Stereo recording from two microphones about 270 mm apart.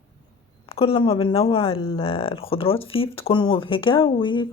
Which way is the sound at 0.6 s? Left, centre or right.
Left.